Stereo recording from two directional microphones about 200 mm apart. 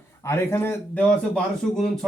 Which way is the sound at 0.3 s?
15° left (ahead or behind).